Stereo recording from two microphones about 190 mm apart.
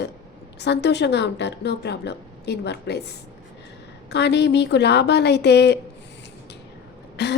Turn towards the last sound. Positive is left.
turn(degrees=65)  # may be behind; listen again after turning